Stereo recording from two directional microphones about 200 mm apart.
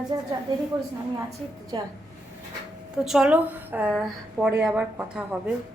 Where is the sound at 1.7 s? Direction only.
20° right (ahead or behind).